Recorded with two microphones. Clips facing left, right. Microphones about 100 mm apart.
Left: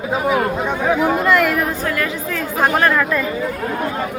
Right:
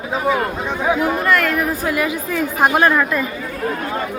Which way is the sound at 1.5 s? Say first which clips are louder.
Right 1 dB; 10° right (ahead or behind).